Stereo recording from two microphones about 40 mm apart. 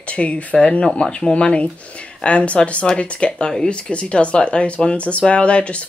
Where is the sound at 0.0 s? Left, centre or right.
Left.